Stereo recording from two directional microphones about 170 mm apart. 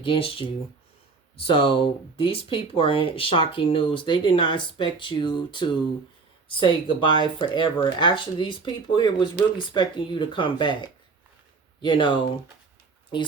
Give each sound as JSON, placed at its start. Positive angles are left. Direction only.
{"t": 0.0, "sound": "speech", "side_deg": 30}